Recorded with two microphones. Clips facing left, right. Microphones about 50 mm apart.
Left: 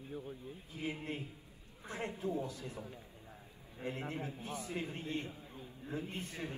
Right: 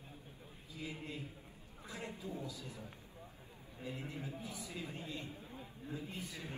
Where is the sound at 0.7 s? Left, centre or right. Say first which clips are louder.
Left 5 dB; left.